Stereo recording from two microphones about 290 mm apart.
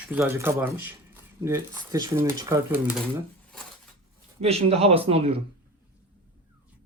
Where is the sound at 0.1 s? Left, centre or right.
Centre.